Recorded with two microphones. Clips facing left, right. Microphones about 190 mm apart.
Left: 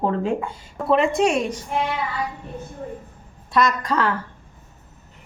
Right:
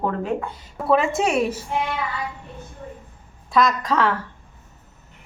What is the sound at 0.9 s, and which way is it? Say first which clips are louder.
Speech: left 1 dB; 5° right (ahead or behind).